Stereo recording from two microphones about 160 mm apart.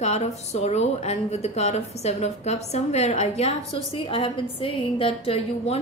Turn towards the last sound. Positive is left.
turn(degrees=35)  # may be behind; listen again after turning